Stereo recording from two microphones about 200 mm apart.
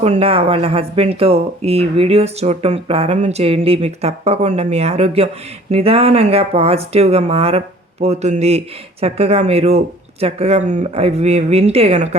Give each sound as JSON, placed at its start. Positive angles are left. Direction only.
{"t": 0.0, "sound": "speech", "side_deg": -30}